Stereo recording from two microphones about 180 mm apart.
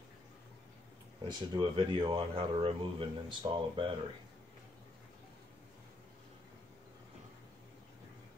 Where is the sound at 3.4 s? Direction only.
20° right (ahead or behind).